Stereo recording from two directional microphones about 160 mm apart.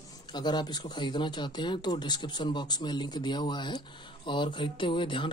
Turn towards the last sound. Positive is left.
turn(degrees=30)  # may be behind; listen again after turning